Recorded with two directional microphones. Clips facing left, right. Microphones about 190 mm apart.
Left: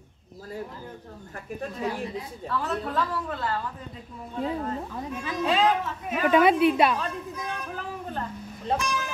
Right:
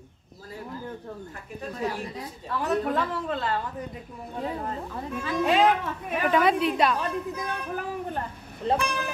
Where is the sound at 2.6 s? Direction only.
20° right (ahead or behind).